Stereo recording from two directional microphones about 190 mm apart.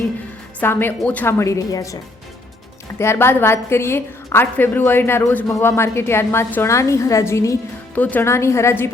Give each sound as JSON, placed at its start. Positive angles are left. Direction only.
{"t": 0.6, "sound": "a woman's voice", "side_deg": 10}
{"t": 3.0, "sound": "a woman's voice", "side_deg": 15}